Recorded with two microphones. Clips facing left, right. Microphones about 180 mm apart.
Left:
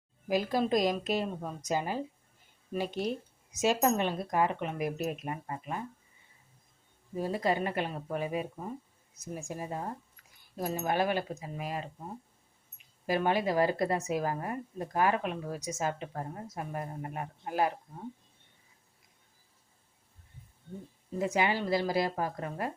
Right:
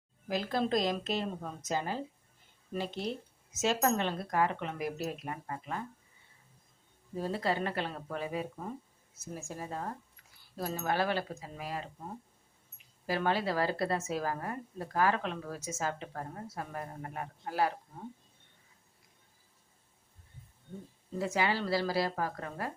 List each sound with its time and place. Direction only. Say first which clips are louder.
0.3 s a woman's voice: left 3 dB; 15° left (ahead or behind)
7.2 s a woman's voice: left 2 dB; 15° left (ahead or behind)
13.1 s a woman's voice: left 3 dB; 15° left (ahead or behind)
21.2 s a woman's voice: left 2 dB; 20° left (ahead or behind)